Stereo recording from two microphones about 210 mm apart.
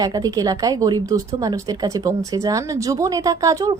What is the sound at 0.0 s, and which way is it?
A woman's voice, 15° right (ahead or behind).